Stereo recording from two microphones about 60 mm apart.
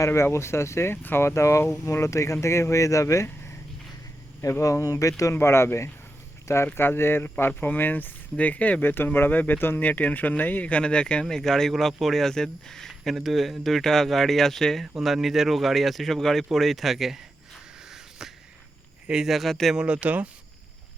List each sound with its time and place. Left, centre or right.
0.1 s speech: left
4.6 s speech: left
5.3 s speech: left; by 12.9 s centre
12.9 s speech: centre
19.0 s speech: centre
19.7 s speech: centre